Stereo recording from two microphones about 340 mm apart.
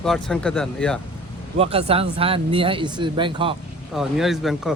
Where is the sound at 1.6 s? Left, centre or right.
Centre.